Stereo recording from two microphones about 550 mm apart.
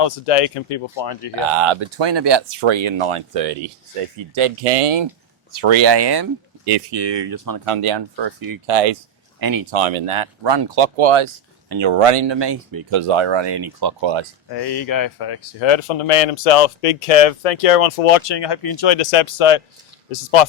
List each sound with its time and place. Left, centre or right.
0.3 s speech: left
0.9 s speech: left
1.5 s speech: right
7.3 s speech: right
7.6 s speech: right
8.6 s speech: right
9.4 s speech: right
9.7 s speech: right
10.8 s speech: right
11.7 s speech: right
11.9 s speech: right
14.5 s speech: left
18.2 s speech: left
18.9 s speech: left